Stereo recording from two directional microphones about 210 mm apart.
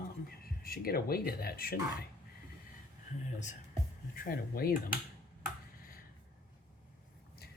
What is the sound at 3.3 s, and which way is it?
Speech, 35° left (ahead or behind).